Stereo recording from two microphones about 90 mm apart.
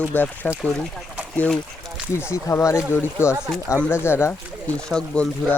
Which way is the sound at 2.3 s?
35° left (ahead or behind).